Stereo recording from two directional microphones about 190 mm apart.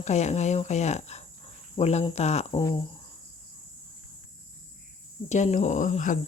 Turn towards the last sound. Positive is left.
turn(degrees=40)  # may be behind; listen again after turning